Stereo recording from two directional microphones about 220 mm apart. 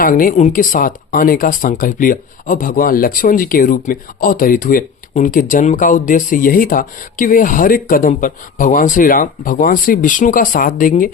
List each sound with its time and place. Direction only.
0.0 s speech: 40° left (ahead or behind)